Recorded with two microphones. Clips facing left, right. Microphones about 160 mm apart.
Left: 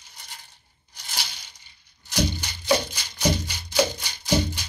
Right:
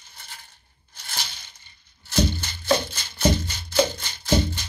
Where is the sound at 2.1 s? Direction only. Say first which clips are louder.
Right 2 dB; 15° left (ahead or behind).